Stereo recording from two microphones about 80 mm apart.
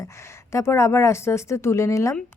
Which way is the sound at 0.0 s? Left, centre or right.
Left.